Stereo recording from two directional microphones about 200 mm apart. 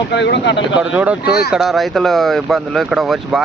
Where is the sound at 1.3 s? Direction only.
50° left (ahead or behind).